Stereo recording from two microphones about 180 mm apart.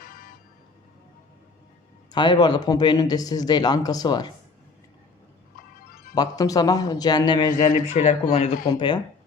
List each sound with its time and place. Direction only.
0.0 s vehicle: 50° left (ahead or behind)
2.1 s speech: 25° left (ahead or behind)
6.1 s speech: 20° left (ahead or behind)
7.5 s a man's voice: 45° left (ahead or behind)
8.6 s speech: 25° left (ahead or behind)